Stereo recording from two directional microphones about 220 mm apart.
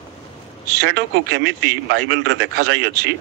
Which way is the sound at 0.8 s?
55° right (ahead or behind).